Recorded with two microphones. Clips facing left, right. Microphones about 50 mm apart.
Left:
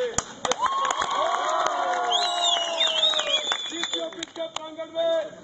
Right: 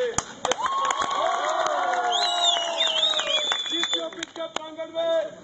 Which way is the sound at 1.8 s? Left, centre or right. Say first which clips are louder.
Right 1 dB; right.